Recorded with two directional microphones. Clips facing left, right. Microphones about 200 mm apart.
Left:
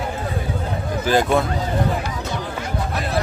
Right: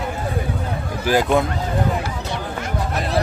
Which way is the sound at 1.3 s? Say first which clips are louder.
Right 1 dB; 15° right (ahead or behind).